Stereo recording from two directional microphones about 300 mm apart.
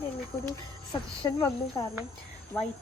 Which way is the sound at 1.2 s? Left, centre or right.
Centre.